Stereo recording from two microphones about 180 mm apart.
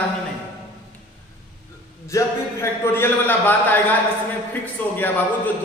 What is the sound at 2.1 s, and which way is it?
A man's voice, 15° left (ahead or behind).